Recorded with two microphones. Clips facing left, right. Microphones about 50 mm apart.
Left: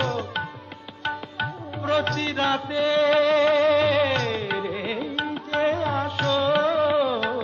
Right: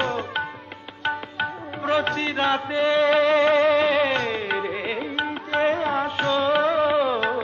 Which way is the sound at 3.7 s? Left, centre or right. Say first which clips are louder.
Even; centre.